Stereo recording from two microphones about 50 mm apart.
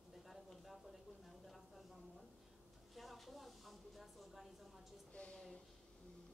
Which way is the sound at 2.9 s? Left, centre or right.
Centre.